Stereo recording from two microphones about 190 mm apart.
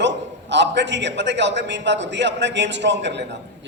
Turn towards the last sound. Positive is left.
turn(degrees=-65)  # may be behind; listen again after turning